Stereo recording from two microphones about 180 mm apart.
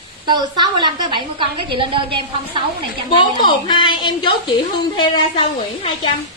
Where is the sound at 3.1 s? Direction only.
25° left (ahead or behind).